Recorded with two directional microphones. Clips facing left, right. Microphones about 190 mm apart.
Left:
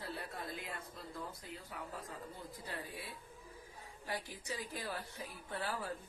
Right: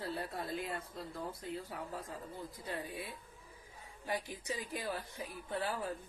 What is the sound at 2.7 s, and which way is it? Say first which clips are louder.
A woman's voice: right 4 dB; 20° right (ahead or behind).